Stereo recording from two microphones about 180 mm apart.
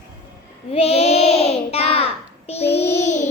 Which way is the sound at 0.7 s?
35° left (ahead or behind).